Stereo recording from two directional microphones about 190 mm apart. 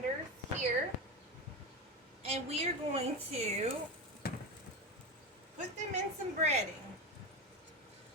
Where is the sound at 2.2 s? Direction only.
30° right (ahead or behind).